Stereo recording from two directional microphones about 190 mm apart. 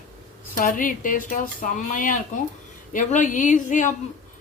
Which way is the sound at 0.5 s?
45° left (ahead or behind).